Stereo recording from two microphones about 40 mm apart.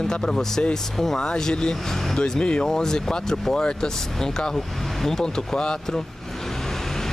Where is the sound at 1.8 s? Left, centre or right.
Centre.